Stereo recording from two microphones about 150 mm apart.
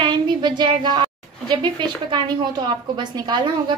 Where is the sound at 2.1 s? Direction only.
30° right (ahead or behind).